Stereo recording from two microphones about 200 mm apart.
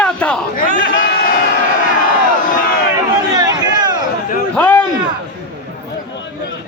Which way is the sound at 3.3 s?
20° right (ahead or behind).